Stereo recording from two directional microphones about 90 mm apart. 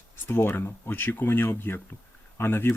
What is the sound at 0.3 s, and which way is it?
Speech, 25° left (ahead or behind).